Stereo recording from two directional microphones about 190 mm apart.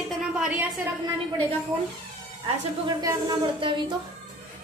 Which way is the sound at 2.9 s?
20° right (ahead or behind).